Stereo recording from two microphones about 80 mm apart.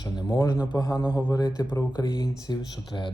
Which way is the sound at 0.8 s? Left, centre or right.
Left.